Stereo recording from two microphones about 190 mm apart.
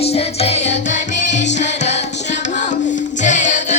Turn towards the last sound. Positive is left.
turn(degrees=40)  # may be behind; listen again after turning